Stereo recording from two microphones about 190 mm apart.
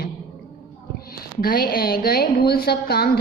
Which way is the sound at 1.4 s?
50° left (ahead or behind).